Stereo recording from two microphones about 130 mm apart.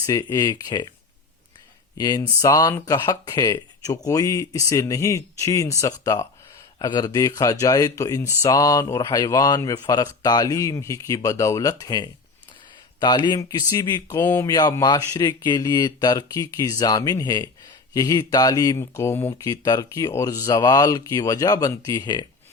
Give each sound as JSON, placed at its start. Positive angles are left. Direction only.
{"t": 0.0, "sound": "speech", "side_deg": 25}
{"t": 2.0, "sound": "speech", "side_deg": 30}